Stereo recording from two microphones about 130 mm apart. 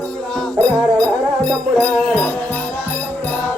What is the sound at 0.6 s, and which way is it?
Music, 10° left (ahead or behind).